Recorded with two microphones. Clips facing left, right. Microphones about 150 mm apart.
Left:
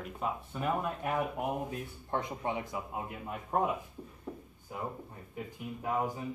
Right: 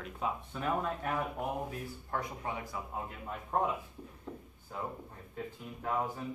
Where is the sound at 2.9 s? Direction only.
10° left (ahead or behind).